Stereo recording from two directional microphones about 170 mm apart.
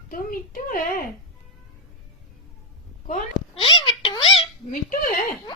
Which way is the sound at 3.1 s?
45° left (ahead or behind).